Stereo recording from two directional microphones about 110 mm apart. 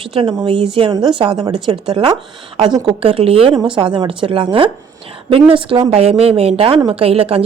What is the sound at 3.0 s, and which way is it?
Speech, 60° right (ahead or behind).